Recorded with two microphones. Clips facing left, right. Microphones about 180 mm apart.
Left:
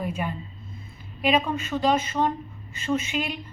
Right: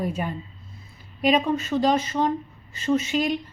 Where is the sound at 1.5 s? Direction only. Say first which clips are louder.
Right 2 dB; 40° right (ahead or behind).